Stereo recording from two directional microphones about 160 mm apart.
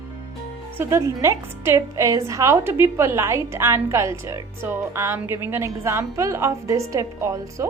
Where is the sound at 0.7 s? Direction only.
15° right (ahead or behind).